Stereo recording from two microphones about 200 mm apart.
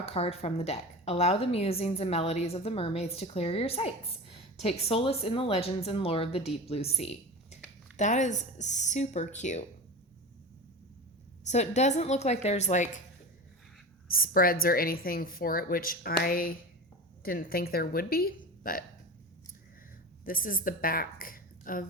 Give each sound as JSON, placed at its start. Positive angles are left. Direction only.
{"t": 0.0, "sound": "a woman's voice", "side_deg": 30}
{"t": 11.4, "sound": "speech", "side_deg": 35}
{"t": 14.1, "sound": "a woman's voice", "side_deg": 45}
{"t": 20.2, "sound": "a woman's voice", "side_deg": 45}